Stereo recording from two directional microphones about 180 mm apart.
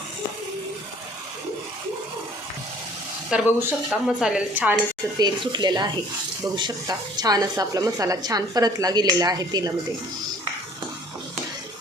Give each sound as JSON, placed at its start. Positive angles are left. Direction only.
{"t": 3.3, "sound": "speech", "side_deg": -5}
{"t": 5.5, "sound": "speech", "side_deg": -25}